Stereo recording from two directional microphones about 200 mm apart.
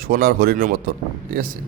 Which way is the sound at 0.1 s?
45° right (ahead or behind).